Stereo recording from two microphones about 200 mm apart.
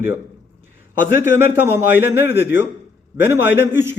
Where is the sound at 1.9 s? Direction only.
55° left (ahead or behind).